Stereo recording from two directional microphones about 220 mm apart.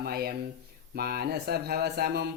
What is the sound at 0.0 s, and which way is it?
Speech, 45° right (ahead or behind).